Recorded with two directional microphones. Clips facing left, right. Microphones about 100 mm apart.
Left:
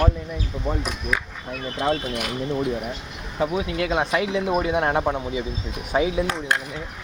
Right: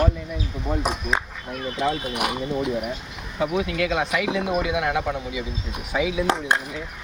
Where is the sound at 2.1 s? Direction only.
60° right (ahead or behind).